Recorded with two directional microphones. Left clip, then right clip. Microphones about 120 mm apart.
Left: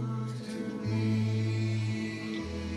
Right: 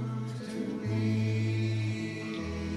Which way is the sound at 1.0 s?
35° left (ahead or behind).